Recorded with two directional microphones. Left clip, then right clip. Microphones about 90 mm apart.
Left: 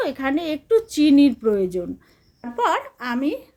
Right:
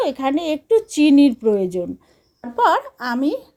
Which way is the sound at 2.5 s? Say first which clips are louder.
Right 5 dB; 40° right (ahead or behind).